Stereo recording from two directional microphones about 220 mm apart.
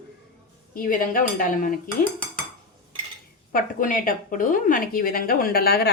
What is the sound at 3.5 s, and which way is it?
Speech, 40° left (ahead or behind).